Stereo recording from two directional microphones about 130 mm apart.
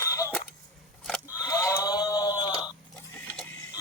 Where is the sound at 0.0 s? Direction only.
25° left (ahead or behind).